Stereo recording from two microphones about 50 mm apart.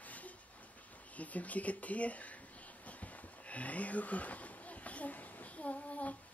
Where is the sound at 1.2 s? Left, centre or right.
Left.